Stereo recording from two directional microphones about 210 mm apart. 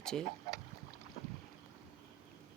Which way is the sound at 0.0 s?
5° left (ahead or behind).